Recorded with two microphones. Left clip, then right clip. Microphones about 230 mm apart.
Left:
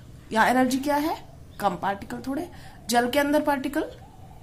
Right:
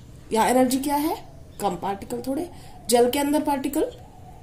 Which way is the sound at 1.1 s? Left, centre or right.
Centre.